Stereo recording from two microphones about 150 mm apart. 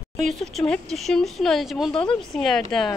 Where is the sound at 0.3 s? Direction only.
Centre (ahead or behind).